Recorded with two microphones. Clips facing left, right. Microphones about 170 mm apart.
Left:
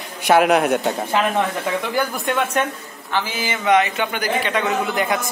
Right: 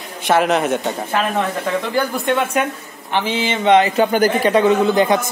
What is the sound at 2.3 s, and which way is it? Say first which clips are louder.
Speech: right 2 dB; centre (ahead or behind).